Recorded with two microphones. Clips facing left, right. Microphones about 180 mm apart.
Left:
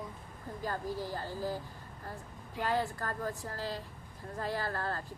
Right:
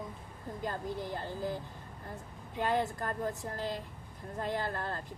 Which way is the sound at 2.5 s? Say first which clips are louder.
Right 1 dB; 20° right (ahead or behind).